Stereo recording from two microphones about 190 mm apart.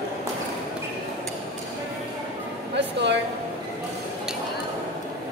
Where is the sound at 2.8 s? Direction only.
65° right (ahead or behind).